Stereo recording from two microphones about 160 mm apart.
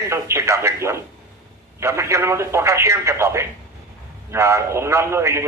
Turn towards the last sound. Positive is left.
turn(degrees=-15)  # may be behind; listen again after turning